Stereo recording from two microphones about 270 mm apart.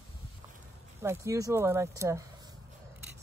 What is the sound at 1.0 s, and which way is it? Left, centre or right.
Speech, centre.